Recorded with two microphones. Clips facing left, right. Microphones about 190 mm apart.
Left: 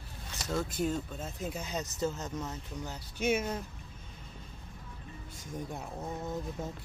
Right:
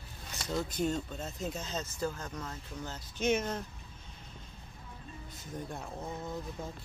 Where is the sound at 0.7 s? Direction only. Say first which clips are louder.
Even; 5° left (ahead or behind).